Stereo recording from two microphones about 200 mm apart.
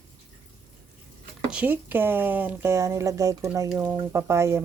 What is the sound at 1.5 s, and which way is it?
Speech, 5° right (ahead or behind).